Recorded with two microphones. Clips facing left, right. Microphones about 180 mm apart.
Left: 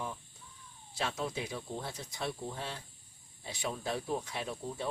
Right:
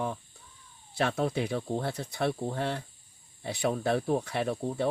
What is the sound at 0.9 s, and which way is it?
Speech, 60° right (ahead or behind).